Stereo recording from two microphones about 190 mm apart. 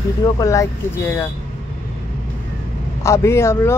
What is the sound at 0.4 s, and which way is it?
Speech, 15° left (ahead or behind).